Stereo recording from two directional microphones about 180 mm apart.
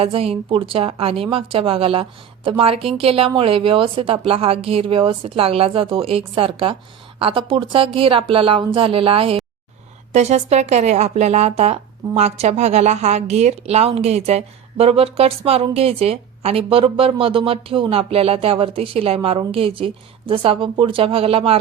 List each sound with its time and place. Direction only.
0.0 s speech: 35° right (ahead or behind)